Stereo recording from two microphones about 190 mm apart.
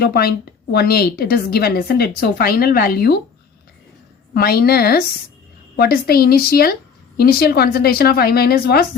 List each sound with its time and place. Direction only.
0.0 s a woman's voice: 55° left (ahead or behind)
4.4 s a woman's voice: 55° left (ahead or behind)